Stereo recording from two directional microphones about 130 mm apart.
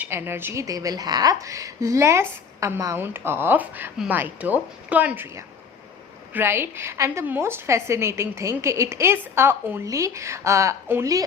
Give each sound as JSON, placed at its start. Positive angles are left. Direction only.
{"t": 0.0, "sound": "a woman's voice", "side_deg": -15}